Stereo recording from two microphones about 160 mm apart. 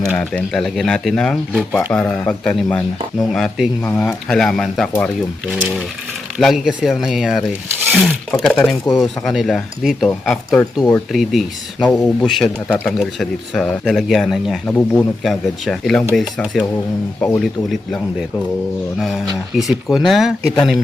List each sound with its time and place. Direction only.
0.2 s speech: 5° left (ahead or behind)
6.4 s speech: centre (ahead or behind)